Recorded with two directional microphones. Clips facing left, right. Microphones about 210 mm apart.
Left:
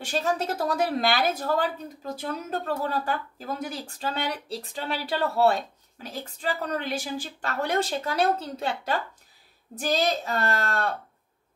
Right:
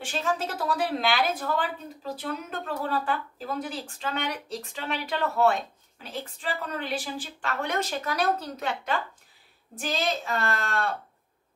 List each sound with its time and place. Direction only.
0.0 s speech: 40° left (ahead or behind)